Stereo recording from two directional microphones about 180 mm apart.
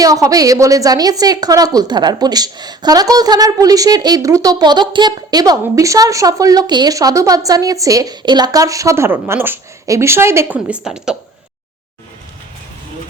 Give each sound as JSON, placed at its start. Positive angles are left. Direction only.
{"t": 0.0, "sound": "a woman's voice", "side_deg": -20}